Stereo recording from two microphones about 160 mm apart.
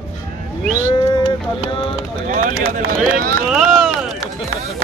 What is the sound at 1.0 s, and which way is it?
Speech, 25° left (ahead or behind).